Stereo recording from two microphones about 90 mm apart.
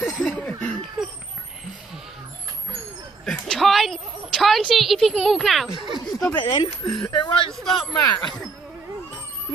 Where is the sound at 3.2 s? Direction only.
5° left (ahead or behind).